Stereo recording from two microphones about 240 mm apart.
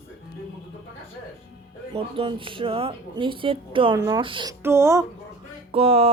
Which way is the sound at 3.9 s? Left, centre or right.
Centre.